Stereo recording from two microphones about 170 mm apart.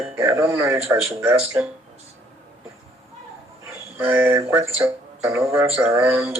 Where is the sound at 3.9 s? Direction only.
15° right (ahead or behind).